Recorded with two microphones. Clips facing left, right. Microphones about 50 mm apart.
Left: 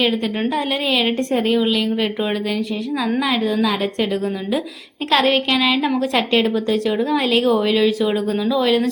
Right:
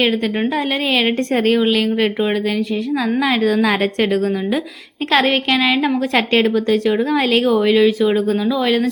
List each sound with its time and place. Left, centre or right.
0.5 s a woman's voice: right
5.1 s a woman's voice: right
6.1 s a woman's voice: right
7.6 s speech: centre